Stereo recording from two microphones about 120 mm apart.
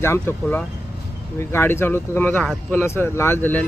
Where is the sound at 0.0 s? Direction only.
20° left (ahead or behind).